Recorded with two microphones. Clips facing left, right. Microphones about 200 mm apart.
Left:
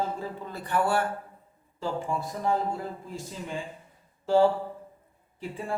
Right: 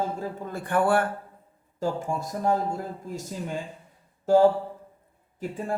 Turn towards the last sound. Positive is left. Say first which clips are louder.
# right 4 dB
turn(degrees=-45)  # may be behind; listen again after turning